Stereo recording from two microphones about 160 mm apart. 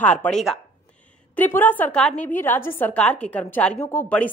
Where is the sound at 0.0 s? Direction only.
10° left (ahead or behind).